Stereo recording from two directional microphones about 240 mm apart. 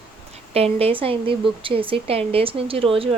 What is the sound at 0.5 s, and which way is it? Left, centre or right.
Speech, right.